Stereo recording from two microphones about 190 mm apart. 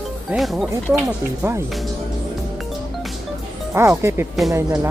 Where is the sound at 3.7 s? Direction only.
15° right (ahead or behind).